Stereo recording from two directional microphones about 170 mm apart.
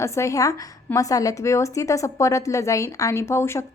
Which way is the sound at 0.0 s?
15° left (ahead or behind).